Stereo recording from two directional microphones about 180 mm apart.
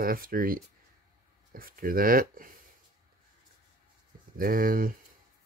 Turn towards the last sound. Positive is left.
turn(degrees=-50)  # may be behind; listen again after turning